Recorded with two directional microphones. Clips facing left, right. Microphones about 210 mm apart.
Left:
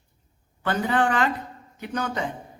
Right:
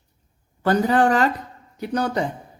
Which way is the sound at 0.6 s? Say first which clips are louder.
Right 6 dB; 40° right (ahead or behind).